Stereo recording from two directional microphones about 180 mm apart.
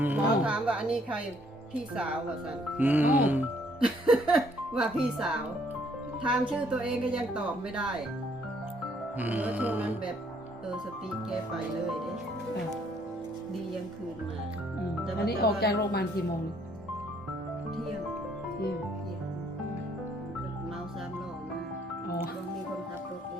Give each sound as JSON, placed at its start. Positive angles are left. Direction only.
{"t": 0.0, "sound": "speech", "side_deg": -10}
{"t": 2.7, "sound": "speech", "side_deg": -10}
{"t": 6.5, "sound": "speech", "side_deg": -5}
{"t": 9.1, "sound": "speech", "side_deg": -10}
{"t": 15.2, "sound": "a woman's voice", "side_deg": 60}